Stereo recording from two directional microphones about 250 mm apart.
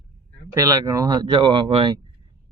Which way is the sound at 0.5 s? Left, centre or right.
Centre.